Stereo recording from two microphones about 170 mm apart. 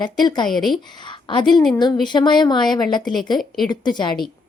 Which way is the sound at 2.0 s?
25° left (ahead or behind).